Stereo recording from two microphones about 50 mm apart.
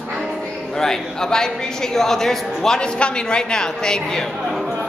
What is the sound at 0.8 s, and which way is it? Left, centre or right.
A woman's voice, centre.